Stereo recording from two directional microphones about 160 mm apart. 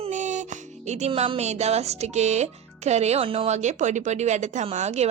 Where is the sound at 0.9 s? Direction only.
45° right (ahead or behind).